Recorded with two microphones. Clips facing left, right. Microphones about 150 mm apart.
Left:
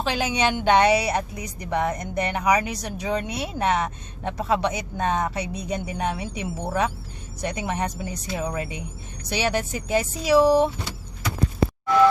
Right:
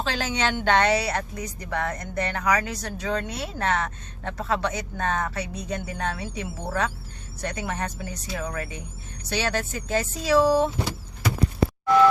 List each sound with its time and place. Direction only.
0.0 s speech: 15° left (ahead or behind)